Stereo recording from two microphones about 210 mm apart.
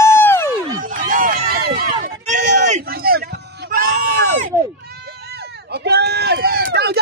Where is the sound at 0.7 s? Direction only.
40° right (ahead or behind).